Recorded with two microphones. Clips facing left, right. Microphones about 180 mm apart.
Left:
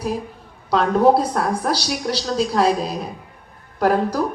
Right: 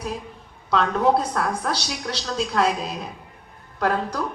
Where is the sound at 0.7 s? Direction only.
35° left (ahead or behind).